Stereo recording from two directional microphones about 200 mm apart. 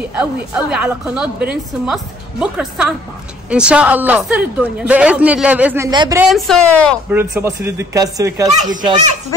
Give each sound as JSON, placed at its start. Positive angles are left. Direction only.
{"t": 0.1, "sound": "a woman's voice", "side_deg": -5}
{"t": 5.9, "sound": "a woman's voice", "side_deg": -20}
{"t": 6.2, "sound": "a woman's voice", "side_deg": 0}
{"t": 7.1, "sound": "speech", "side_deg": -10}